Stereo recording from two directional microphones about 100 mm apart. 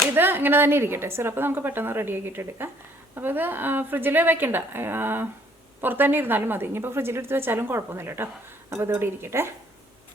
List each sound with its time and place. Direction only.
0.0 s speech: 20° right (ahead or behind)